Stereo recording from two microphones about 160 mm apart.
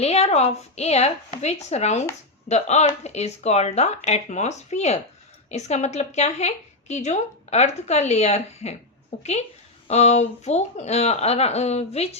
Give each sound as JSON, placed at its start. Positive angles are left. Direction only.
{"t": 0.0, "sound": "a woman's voice", "side_deg": 40}